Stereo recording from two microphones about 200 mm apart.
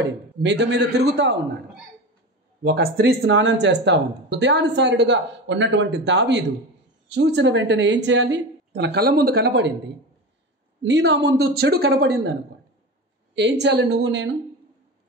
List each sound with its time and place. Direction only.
0.0 s speech: 60° right (ahead or behind)
2.6 s speech: 55° right (ahead or behind)
10.8 s speech: 60° right (ahead or behind)